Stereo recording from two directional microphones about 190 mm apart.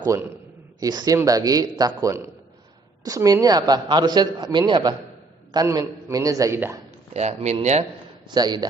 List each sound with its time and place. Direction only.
0.8 s a man's voice: 20° right (ahead or behind)
7.1 s speech: 35° right (ahead or behind)
8.3 s a man's voice: 20° right (ahead or behind)